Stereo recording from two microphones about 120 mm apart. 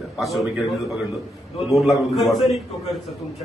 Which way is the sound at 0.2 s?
Centre (ahead or behind).